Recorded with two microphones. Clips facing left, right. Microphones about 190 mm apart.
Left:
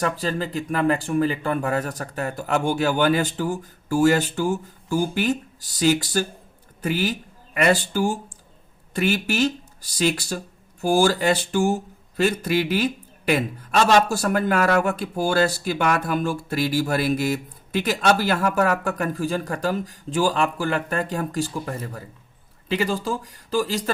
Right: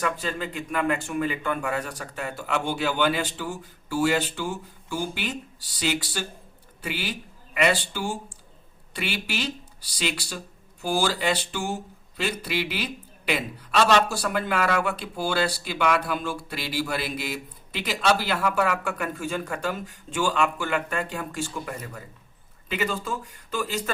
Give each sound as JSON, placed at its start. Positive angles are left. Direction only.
{"t": 0.0, "sound": "speech", "side_deg": 35}